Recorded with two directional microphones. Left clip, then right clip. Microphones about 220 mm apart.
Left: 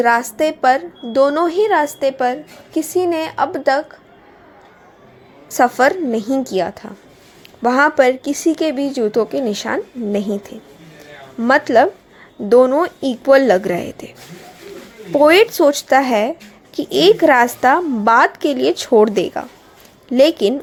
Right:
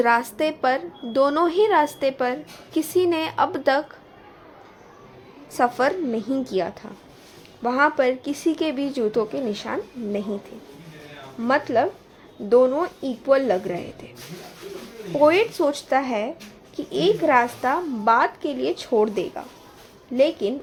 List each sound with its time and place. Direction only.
0.0 s speech: 15° left (ahead or behind)
5.5 s a woman's voice: 20° left (ahead or behind)
11.4 s a woman's voice: 25° left (ahead or behind)
15.1 s a woman's voice: 25° left (ahead or behind)